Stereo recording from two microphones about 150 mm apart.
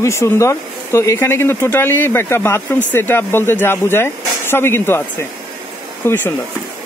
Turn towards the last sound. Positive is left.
turn(degrees=15)  # may be behind; listen again after turning